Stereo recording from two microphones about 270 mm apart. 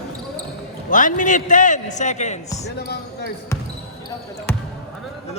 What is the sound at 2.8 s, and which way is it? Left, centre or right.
Speech, left.